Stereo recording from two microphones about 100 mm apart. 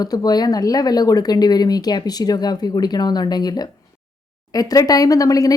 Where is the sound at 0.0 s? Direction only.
40° left (ahead or behind).